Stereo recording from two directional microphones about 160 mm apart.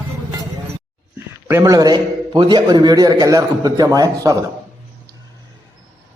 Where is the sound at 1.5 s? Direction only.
20° right (ahead or behind).